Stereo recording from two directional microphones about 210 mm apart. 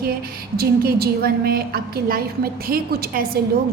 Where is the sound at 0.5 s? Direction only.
50° right (ahead or behind).